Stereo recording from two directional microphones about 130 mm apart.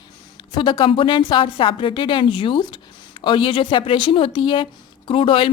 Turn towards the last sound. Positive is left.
turn(degrees=40)  # may be behind; listen again after turning